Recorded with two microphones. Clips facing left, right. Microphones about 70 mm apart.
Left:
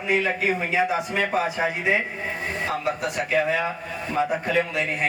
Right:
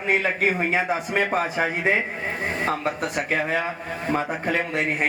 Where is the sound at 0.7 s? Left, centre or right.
Right.